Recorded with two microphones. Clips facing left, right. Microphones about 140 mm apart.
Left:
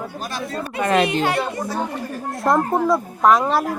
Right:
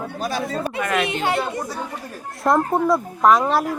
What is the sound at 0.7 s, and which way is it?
Speech, 25° left (ahead or behind).